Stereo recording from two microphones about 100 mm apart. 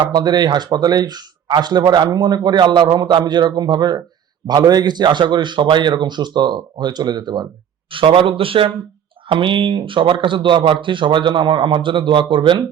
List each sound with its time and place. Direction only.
0.1 s speech: 45° right (ahead or behind)
7.9 s speech: 60° right (ahead or behind)